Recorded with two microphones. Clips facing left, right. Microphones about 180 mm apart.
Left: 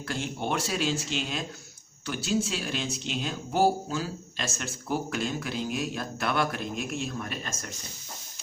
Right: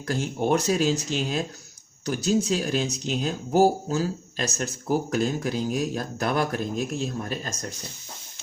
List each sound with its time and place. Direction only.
0.1 s speech: 40° right (ahead or behind)